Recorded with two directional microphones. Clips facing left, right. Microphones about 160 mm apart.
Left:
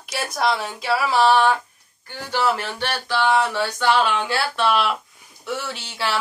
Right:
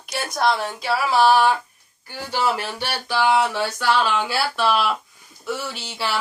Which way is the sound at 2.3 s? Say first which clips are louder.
Left 1 dB; 10° right (ahead or behind).